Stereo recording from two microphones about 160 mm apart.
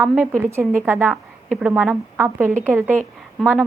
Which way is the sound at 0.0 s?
5° right (ahead or behind).